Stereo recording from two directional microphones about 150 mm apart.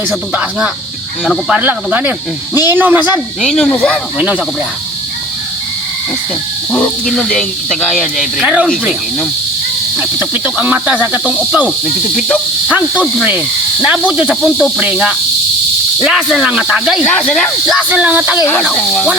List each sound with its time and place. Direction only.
1.2 s speech: 5° right (ahead or behind)
3.4 s speech: 5° left (ahead or behind)
6.7 s speech: 10° left (ahead or behind)
10.0 s speech: 10° right (ahead or behind)
17.7 s speech: 10° right (ahead or behind)
18.5 s speech: 5° left (ahead or behind)